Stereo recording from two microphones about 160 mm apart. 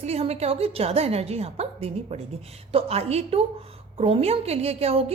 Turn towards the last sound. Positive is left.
turn(degrees=-40)  # may be behind; listen again after turning